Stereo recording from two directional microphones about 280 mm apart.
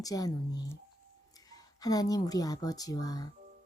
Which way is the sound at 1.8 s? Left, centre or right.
Centre.